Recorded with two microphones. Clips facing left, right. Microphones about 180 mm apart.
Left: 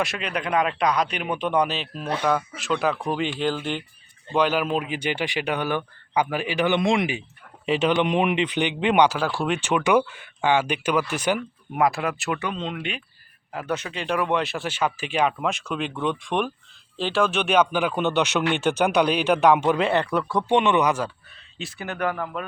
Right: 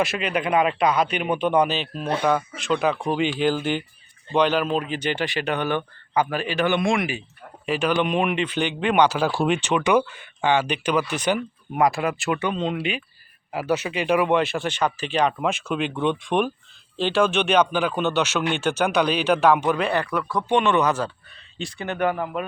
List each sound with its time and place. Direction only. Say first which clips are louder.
0.0 s speech: right 3 dB; centre (ahead or behind)
4.4 s speech: right 1 dB; 5° left (ahead or behind)
9.2 s a man's voice: right 3 dB; 15° right (ahead or behind)
9.6 s speech: even; 10° left (ahead or behind)
20.1 s speech: left 2 dB; centre (ahead or behind)
20.5 s speech: even; 20° left (ahead or behind); by 22.1 s centre (ahead or behind)
22.1 s a man's voice: right 3 dB; 10° right (ahead or behind)